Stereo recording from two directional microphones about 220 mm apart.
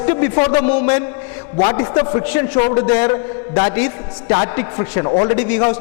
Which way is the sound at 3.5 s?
20° left (ahead or behind).